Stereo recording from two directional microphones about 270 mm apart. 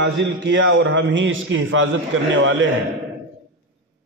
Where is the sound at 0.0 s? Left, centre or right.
Right.